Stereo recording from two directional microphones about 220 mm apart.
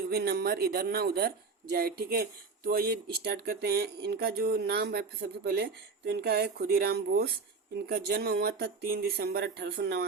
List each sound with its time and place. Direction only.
0.1 s speech: 45° right (ahead or behind)